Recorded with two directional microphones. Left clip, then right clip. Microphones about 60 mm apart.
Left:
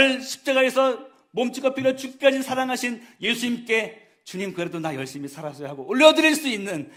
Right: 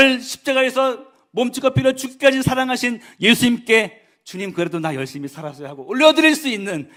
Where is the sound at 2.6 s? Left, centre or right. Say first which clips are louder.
Right 5 dB; right.